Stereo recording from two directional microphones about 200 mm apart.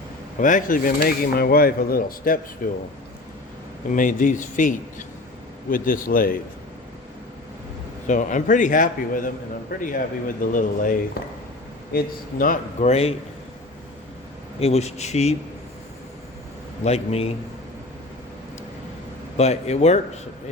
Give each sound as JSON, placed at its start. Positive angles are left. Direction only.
{"t": 0.3, "sound": "speech", "side_deg": 40}
{"t": 3.9, "sound": "a man's voice", "side_deg": 40}
{"t": 5.7, "sound": "speech", "side_deg": 45}
{"t": 8.0, "sound": "a man's voice", "side_deg": 40}
{"t": 14.6, "sound": "a man's voice", "side_deg": 30}
{"t": 16.8, "sound": "a man's voice", "side_deg": 30}
{"t": 19.4, "sound": "a man's voice", "side_deg": 35}